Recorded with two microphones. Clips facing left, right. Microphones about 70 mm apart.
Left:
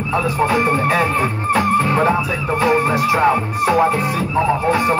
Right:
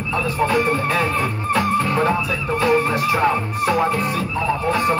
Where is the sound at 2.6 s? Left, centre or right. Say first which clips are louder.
Left 2 dB; centre.